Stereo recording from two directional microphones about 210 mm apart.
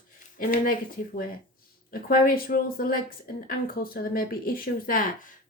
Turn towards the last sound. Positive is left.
turn(degrees=40)  # may be behind; listen again after turning